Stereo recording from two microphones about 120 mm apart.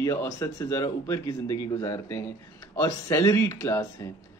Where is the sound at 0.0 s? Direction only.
25° left (ahead or behind).